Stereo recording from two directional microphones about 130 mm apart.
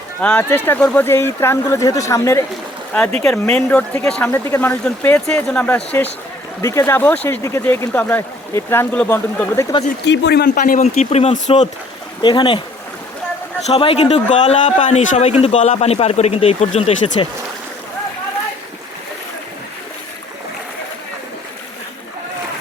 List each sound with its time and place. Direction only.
0.2 s speech: 10° left (ahead or behind)
2.9 s speech: 10° left (ahead or behind)
6.6 s speech: 25° left (ahead or behind)
10.5 s speech: 90° left
10.9 s speech: 55° left (ahead or behind)
12.2 s speech: 35° left (ahead or behind)
13.7 s a man's voice: 45° left (ahead or behind)
14.3 s a man's voice: 65° left (ahead or behind)